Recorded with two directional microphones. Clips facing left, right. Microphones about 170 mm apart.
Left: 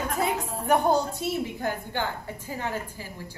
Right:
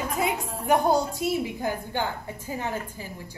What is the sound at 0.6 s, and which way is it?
A woman's voice, 10° right (ahead or behind).